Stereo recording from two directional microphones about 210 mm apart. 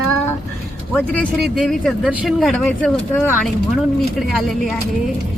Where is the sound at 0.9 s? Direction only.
5° left (ahead or behind).